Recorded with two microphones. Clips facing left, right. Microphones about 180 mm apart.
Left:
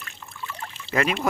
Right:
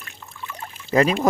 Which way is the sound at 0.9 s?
35° right (ahead or behind).